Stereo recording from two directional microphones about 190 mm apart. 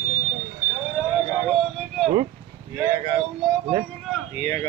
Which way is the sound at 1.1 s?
Centre (ahead or behind).